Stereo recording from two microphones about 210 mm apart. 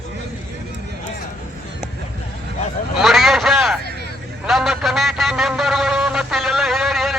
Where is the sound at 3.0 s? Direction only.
Centre (ahead or behind).